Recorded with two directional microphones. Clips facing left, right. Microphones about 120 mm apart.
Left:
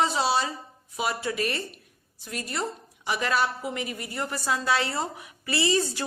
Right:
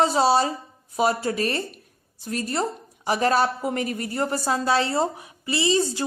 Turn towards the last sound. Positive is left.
turn(degrees=-25)  # may be behind; listen again after turning